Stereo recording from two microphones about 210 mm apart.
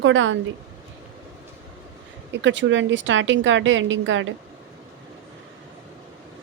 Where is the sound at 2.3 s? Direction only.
60° right (ahead or behind).